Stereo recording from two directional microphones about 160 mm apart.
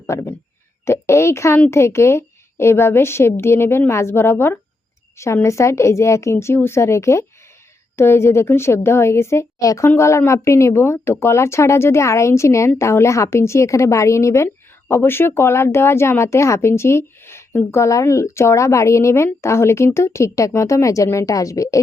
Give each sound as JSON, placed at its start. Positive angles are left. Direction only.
{"t": 0.1, "sound": "a woman's voice", "side_deg": 15}